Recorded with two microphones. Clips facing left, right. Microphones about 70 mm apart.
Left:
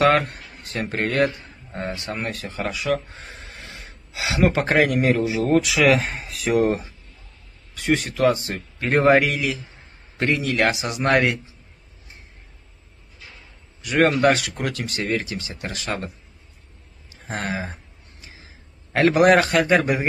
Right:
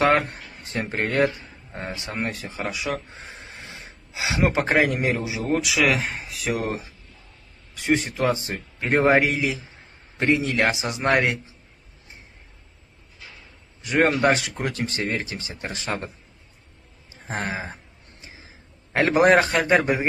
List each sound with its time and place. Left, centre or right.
0.3 s a sound: right
1.0 s a man's voice: centre
3.1 s a sound: centre
4.6 s speech: centre
5.2 s speech: centre
7.8 s speech: right
8.9 s speech: centre
14.1 s speech: right
17.1 s speech: right
19.0 s speech: right